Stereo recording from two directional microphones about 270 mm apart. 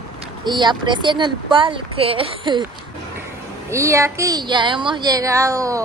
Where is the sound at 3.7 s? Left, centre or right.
Centre.